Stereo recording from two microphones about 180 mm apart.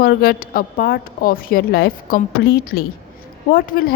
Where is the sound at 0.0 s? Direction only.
55° left (ahead or behind).